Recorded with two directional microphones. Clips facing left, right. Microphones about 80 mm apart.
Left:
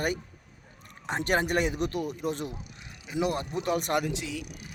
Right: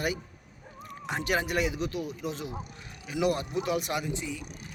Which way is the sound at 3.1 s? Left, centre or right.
Left.